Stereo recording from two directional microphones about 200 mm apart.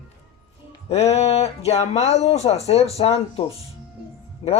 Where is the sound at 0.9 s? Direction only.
30° left (ahead or behind).